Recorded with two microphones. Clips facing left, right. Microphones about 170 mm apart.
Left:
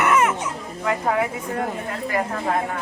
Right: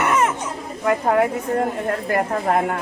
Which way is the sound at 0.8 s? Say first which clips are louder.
Right 4 dB; 55° right (ahead or behind).